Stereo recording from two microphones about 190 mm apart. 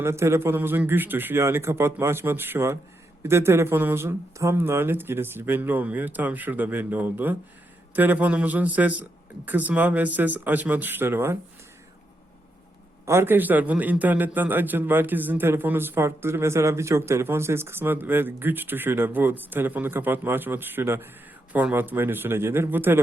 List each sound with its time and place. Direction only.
0.0 s a man's voice: 15° right (ahead or behind)
13.1 s a man's voice: 10° right (ahead or behind)